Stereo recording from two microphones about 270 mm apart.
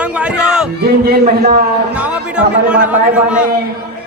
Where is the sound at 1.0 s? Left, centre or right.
Right.